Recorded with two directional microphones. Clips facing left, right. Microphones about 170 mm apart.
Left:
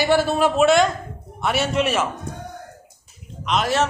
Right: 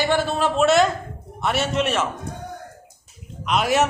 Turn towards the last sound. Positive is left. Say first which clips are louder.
# right 1 dB
turn(degrees=-10)  # may be behind; listen again after turning